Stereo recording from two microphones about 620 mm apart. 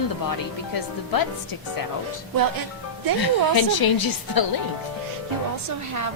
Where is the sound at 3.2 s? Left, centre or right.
Left.